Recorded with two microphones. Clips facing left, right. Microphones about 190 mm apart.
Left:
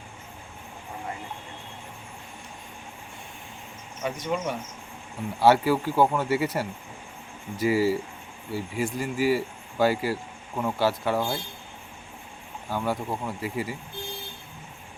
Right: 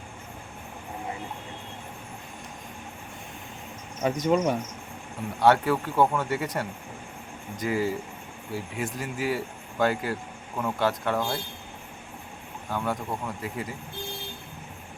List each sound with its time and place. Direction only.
4.0 s speech: 40° right (ahead or behind)
5.4 s speech: 5° left (ahead or behind)
12.7 s speech: 5° left (ahead or behind)